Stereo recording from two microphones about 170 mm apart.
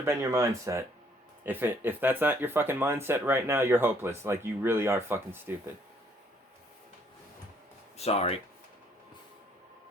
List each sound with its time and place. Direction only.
0.0 s speech: 15° right (ahead or behind)
7.9 s speech: 35° left (ahead or behind)